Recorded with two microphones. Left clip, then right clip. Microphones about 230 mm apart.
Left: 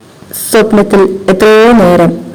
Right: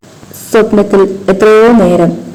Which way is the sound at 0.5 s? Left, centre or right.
Left.